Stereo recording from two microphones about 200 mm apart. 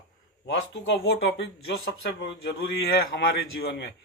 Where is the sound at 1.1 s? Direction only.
60° left (ahead or behind).